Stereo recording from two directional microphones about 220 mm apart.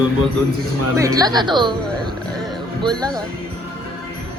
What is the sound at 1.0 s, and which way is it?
Speech, 15° right (ahead or behind).